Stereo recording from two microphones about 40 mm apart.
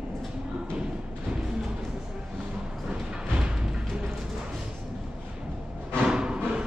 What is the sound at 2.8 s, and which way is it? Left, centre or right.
Music, centre.